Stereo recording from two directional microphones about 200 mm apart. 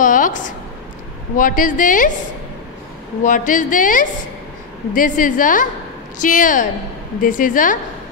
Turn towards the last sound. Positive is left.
turn(degrees=40)  # may be behind; listen again after turning